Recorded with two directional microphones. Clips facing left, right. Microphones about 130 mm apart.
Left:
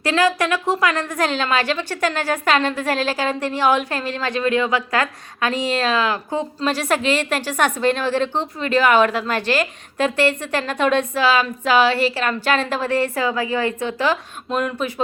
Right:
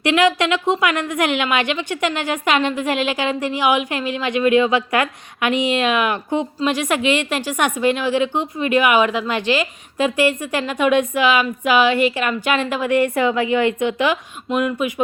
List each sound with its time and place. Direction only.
0.0 s a woman's voice: 20° right (ahead or behind)
3.1 s a woman's voice: 40° left (ahead or behind)
3.4 s a woman's voice: 15° right (ahead or behind)
6.9 s a woman's voice: 40° left (ahead or behind)
7.4 s a woman's voice: 15° right (ahead or behind)
9.3 s a woman's voice: 45° left (ahead or behind)
10.0 s a woman's voice: 10° right (ahead or behind)
14.5 s a woman's voice: 5° right (ahead or behind)